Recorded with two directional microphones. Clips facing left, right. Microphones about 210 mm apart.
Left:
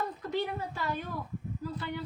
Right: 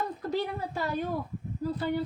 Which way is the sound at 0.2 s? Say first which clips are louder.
Right 2 dB; 40° right (ahead or behind).